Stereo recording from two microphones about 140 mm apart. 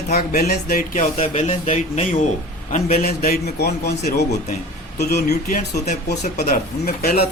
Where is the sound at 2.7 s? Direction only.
90° left.